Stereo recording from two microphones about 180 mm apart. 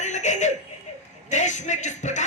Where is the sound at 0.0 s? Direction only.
40° left (ahead or behind).